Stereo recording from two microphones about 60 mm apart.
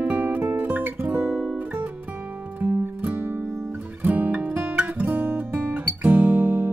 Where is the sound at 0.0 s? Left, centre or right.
Right.